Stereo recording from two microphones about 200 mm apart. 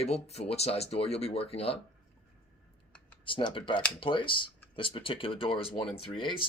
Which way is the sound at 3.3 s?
25° left (ahead or behind).